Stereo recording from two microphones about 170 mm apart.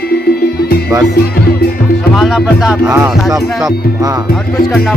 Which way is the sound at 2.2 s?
5° right (ahead or behind).